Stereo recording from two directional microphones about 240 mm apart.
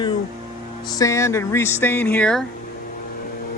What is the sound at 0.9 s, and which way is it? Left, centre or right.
Speech, centre.